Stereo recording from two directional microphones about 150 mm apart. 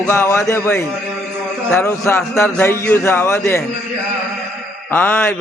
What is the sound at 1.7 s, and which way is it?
Speech, 20° left (ahead or behind).